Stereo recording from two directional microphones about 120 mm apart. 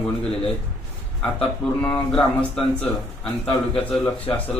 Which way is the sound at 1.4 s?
15° left (ahead or behind).